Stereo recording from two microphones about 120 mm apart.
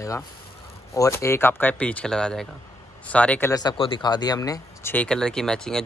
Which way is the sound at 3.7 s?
45° left (ahead or behind).